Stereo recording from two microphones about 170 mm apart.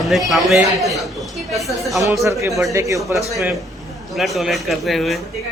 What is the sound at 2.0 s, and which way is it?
Speech, 20° right (ahead or behind).